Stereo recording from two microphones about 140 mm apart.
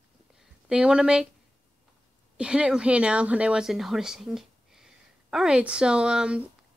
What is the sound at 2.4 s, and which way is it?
Speech, 5° right (ahead or behind).